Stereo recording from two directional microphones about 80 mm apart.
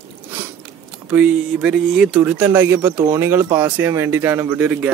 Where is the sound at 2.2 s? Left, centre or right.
Right.